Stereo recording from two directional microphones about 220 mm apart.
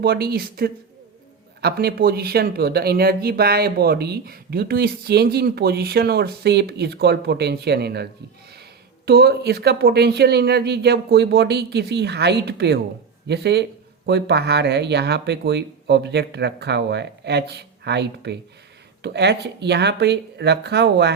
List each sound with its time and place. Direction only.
0.0 s speech: 45° right (ahead or behind)
9.0 s speech: 45° right (ahead or behind)